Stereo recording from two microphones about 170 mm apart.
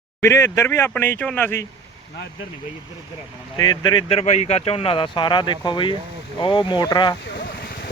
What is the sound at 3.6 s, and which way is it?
Speech, 25° left (ahead or behind).